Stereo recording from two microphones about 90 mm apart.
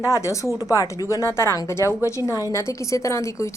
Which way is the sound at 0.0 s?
35° left (ahead or behind).